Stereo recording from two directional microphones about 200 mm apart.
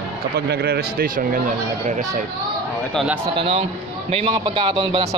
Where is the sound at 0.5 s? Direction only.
50° right (ahead or behind).